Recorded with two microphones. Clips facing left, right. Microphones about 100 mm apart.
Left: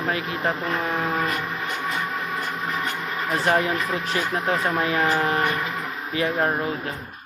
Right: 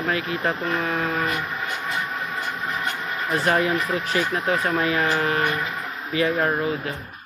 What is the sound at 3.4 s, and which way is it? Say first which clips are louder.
Speech: right 1 dB; 25° left (ahead or behind).